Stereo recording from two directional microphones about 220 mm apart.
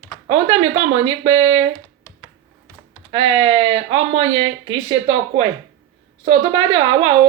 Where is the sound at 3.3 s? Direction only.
20° right (ahead or behind).